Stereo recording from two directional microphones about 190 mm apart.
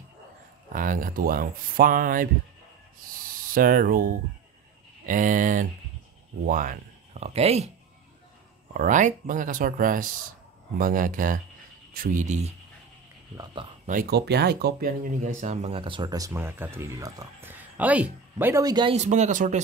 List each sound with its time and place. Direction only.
0.7 s speech: 45° right (ahead or behind)
3.4 s speech: 45° right (ahead or behind)
8.7 s speech: 40° right (ahead or behind)
13.8 s speech: 50° right (ahead or behind); by 18.9 s 20° right (ahead or behind)
18.9 s speech: 35° right (ahead or behind)